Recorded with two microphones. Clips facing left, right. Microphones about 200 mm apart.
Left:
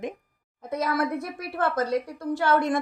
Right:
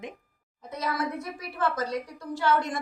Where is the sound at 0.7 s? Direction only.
55° left (ahead or behind).